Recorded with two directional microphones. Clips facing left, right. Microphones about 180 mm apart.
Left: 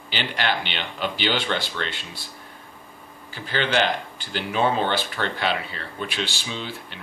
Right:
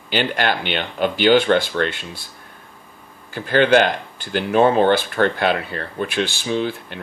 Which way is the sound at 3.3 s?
50° right (ahead or behind).